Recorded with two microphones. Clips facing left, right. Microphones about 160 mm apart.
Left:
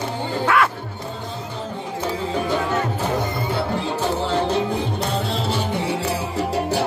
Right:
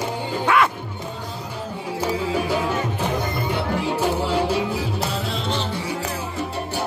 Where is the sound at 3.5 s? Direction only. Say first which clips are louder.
Right 1 dB; 10° right (ahead or behind); by 5.7 s 5° left (ahead or behind).